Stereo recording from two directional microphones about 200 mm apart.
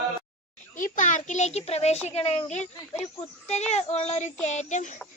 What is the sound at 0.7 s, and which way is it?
A child's voice, 40° left (ahead or behind).